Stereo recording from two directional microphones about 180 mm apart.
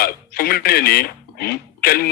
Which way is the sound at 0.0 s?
55° left (ahead or behind).